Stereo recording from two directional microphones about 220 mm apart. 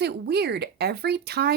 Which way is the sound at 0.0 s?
50° right (ahead or behind).